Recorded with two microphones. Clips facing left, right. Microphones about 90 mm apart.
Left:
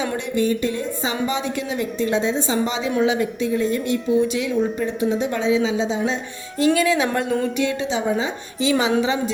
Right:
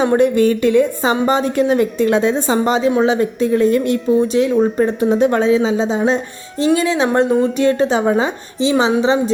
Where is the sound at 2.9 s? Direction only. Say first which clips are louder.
Right 5 dB; 35° right (ahead or behind).